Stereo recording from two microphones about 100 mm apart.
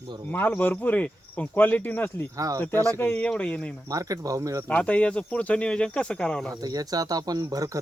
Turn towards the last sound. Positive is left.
turn(degrees=-35)  # may be behind; listen again after turning